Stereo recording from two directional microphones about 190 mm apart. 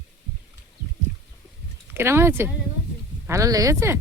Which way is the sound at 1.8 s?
15° right (ahead or behind).